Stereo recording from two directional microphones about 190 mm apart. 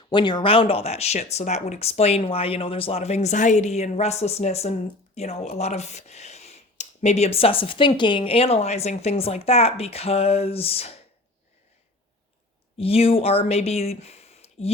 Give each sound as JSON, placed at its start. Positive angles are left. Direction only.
{"t": 0.1, "sound": "speech", "side_deg": 25}
{"t": 12.7, "sound": "speech", "side_deg": 30}